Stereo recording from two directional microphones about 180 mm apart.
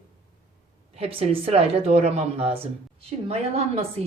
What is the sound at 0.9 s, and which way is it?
Speech, 35° right (ahead or behind).